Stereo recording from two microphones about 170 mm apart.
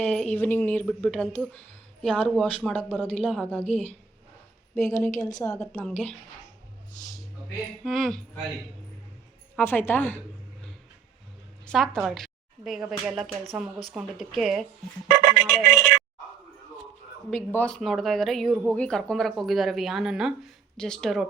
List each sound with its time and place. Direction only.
0.0 s speech: 5° left (ahead or behind)
7.9 s speech: centre (ahead or behind)
9.6 s speech: 10° left (ahead or behind)
11.6 s speech: centre (ahead or behind)
15.2 s telephone: 70° right (ahead or behind)
15.5 s speech: centre (ahead or behind)
17.3 s speech: 10° left (ahead or behind)